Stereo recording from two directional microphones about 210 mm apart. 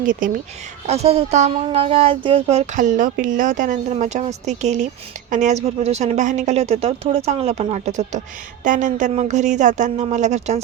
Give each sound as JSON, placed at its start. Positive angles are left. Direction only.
{"t": 0.0, "sound": "speech", "side_deg": -40}